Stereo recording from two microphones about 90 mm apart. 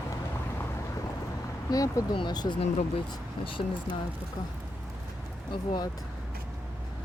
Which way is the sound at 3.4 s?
75° left (ahead or behind).